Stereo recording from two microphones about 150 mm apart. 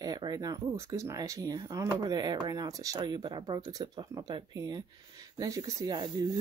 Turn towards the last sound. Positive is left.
turn(degrees=-25)  # may be behind; listen again after turning